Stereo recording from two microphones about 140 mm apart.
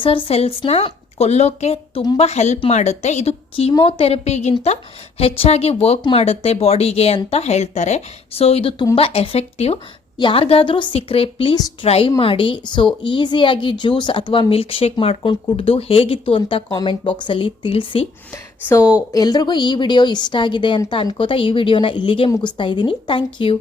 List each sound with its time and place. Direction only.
0.0 s speech: 40° left (ahead or behind)
3.5 s speech: 40° left (ahead or behind)
19.1 s speech: 30° left (ahead or behind)